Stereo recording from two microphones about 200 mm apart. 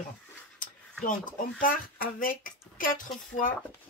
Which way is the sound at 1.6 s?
45° left (ahead or behind).